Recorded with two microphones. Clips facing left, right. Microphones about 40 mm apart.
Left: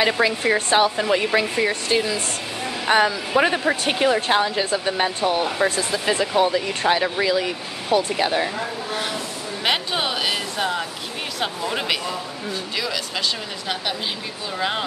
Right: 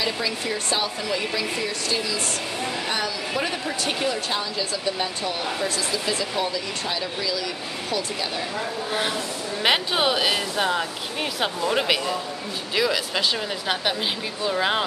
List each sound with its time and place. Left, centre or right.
0.0 s speech: left
9.6 s speech: centre
14.5 s speech: centre